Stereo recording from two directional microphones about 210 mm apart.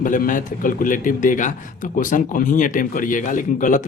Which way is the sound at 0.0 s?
40° left (ahead or behind).